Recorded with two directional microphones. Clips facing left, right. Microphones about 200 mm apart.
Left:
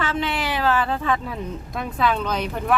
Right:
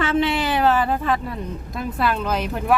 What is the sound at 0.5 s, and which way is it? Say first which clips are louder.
Speech: right 2 dB; 15° right (ahead or behind).